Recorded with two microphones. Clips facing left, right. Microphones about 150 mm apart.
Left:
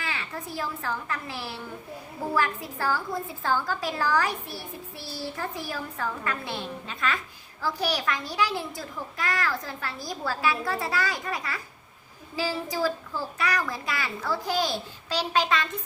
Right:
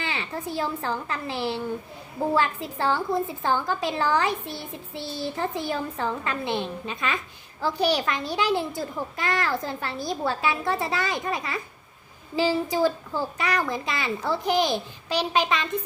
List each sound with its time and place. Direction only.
0.0 s a child's voice: 25° right (ahead or behind)